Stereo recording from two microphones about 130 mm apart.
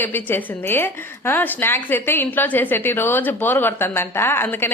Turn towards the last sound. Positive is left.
turn(degrees=15)  # may be behind; listen again after turning